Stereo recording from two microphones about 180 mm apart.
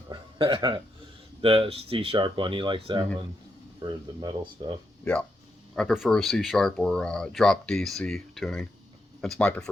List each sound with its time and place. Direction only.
0.1 s a sound: 30° right (ahead or behind)
1.4 s speech: 30° right (ahead or behind)
5.7 s speech: centre (ahead or behind)